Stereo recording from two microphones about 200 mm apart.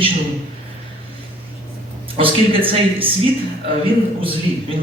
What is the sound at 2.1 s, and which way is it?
Speech, 25° right (ahead or behind).